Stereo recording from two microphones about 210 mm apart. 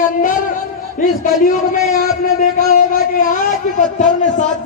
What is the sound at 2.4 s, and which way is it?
A man's voice, 45° left (ahead or behind).